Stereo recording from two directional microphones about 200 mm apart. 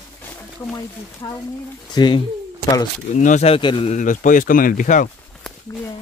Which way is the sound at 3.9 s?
40° left (ahead or behind).